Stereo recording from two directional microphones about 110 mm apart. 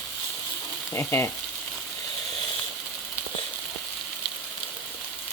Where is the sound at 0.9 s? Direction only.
20° left (ahead or behind).